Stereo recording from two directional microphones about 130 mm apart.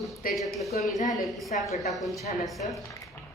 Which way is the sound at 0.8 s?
60° left (ahead or behind).